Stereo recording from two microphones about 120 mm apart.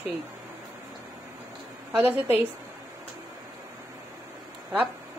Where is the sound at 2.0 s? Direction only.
15° right (ahead or behind).